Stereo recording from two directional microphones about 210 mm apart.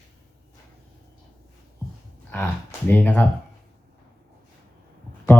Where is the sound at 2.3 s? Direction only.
10° left (ahead or behind).